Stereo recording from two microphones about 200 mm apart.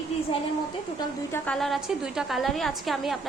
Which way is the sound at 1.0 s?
10° left (ahead or behind).